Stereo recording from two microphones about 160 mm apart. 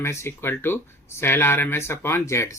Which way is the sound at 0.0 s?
15° left (ahead or behind).